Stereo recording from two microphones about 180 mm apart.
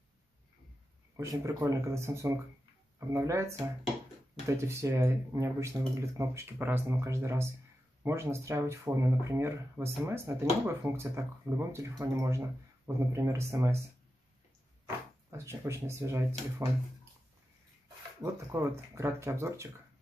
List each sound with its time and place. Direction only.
1.1 s speech: 15° right (ahead or behind)
15.3 s speech: 15° right (ahead or behind)
18.2 s speech: 15° right (ahead or behind)